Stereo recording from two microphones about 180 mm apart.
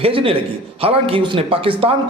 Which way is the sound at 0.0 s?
30° right (ahead or behind).